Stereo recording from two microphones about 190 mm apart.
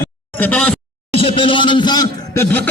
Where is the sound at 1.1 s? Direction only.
30° left (ahead or behind).